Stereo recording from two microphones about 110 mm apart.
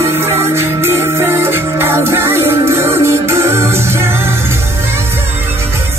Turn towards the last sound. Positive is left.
turn(degrees=-20)  # may be behind; listen again after turning